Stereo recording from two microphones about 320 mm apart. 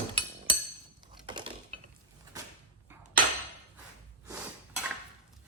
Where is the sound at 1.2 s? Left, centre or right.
Centre.